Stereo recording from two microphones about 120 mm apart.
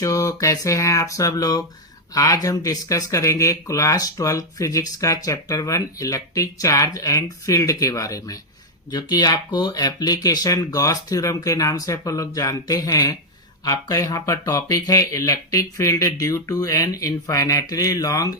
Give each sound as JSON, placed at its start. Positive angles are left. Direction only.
{"t": 0.0, "sound": "speech", "side_deg": 30}